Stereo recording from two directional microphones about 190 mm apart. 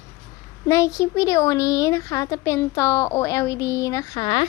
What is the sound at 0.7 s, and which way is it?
Speech, 15° left (ahead or behind).